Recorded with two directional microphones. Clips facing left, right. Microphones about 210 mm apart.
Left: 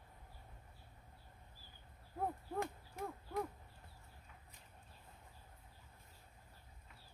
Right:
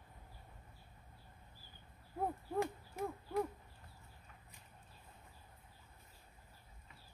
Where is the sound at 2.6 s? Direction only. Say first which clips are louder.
Right 5 dB; 5° right (ahead or behind).